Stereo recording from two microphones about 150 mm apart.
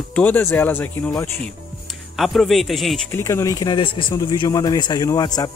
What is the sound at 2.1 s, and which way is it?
Speech, centre (ahead or behind).